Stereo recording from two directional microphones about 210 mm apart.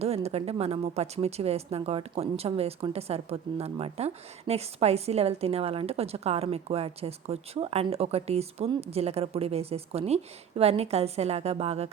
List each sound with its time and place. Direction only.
0.0 s speech: 30° right (ahead or behind)